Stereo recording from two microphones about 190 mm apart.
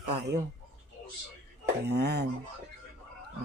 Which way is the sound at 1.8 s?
60° right (ahead or behind).